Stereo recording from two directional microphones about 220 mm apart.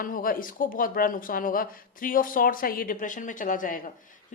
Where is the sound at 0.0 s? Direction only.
40° left (ahead or behind).